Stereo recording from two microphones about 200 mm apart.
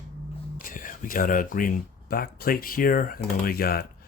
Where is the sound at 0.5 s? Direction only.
45° left (ahead or behind).